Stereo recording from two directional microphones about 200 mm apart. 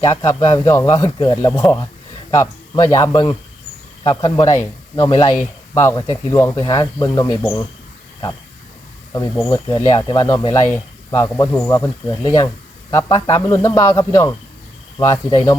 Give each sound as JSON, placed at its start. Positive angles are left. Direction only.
{"t": 0.0, "sound": "speech", "side_deg": 15}
{"t": 9.5, "sound": "speech", "side_deg": 15}